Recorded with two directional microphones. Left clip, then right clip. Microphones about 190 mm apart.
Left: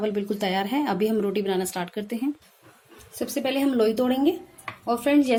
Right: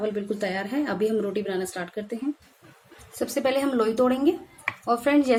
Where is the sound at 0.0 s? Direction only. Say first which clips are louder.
Left 1 dB; 35° left (ahead or behind).